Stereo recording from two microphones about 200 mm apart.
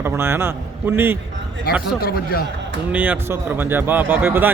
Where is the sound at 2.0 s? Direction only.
50° left (ahead or behind).